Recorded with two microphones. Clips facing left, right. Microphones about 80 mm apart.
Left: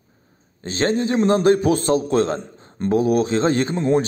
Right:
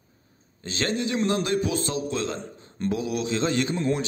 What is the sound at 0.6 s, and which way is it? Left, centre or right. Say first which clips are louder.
A man's voice: left 7 dB; left.